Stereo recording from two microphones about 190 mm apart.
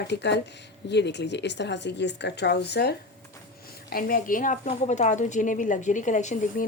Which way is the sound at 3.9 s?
50° left (ahead or behind).